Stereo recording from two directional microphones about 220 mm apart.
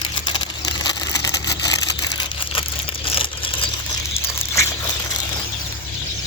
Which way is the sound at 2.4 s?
25° left (ahead or behind).